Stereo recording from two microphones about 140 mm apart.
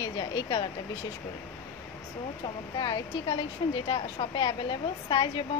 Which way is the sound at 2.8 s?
35° left (ahead or behind).